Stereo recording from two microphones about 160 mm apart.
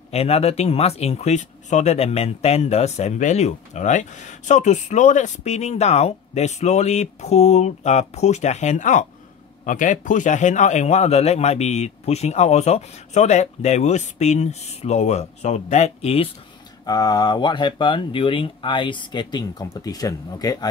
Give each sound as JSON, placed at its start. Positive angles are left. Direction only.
{"t": 0.1, "sound": "speech", "side_deg": 40}
{"t": 16.8, "sound": "speech", "side_deg": 25}